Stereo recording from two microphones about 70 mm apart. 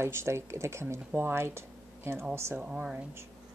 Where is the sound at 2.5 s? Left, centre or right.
Centre.